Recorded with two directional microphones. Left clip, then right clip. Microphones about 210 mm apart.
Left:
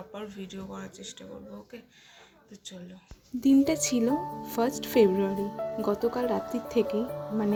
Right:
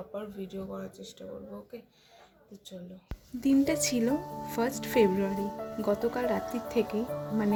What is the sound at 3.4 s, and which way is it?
Speech, 10° left (ahead or behind).